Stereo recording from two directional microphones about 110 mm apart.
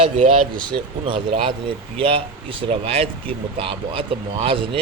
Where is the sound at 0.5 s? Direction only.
50° right (ahead or behind).